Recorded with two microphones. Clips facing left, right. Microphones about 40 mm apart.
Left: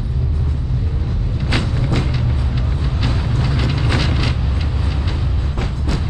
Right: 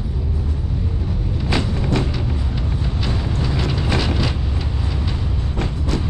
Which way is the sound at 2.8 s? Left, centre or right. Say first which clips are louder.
Left 2 dB; centre.